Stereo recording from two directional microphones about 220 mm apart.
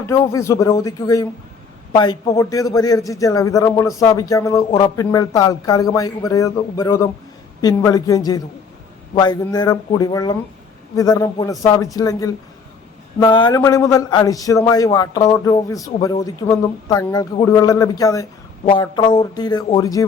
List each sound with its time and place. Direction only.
0.0 s a man's voice: 15° left (ahead or behind)